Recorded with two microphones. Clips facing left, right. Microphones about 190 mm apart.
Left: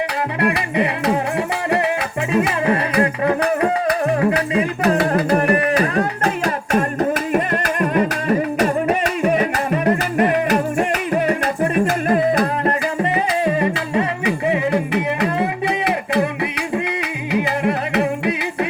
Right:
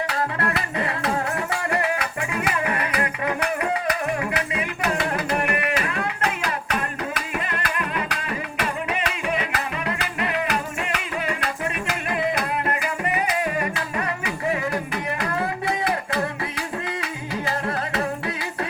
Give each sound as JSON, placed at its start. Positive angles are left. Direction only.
{"t": 0.3, "sound": "music", "side_deg": 20}
{"t": 2.3, "sound": "music", "side_deg": 30}